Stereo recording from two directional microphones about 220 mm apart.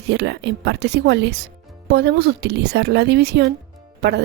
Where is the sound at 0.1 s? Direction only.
50° right (ahead or behind).